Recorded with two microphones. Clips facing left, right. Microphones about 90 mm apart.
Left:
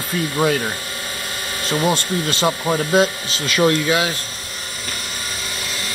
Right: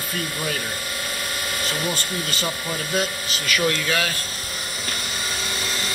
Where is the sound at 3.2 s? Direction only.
25° left (ahead or behind).